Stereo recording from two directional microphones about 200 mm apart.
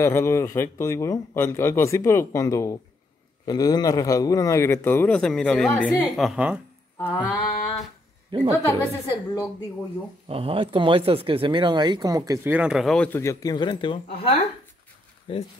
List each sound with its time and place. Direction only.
0.0 s speech: 15° left (ahead or behind); by 6.6 s 5° right (ahead or behind)
7.0 s music: 10° left (ahead or behind)
8.3 s speech: 25° right (ahead or behind)
9.0 s speech: 15° left (ahead or behind)
10.2 s speech: 30° right (ahead or behind)
12.5 s speech: 5° right (ahead or behind); by 15.4 s 25° left (ahead or behind)